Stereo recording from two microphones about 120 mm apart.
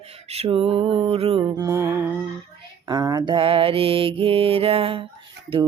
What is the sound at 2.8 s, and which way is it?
Mantra, 35° right (ahead or behind).